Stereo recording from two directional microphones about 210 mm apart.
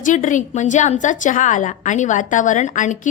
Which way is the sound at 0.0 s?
35° left (ahead or behind).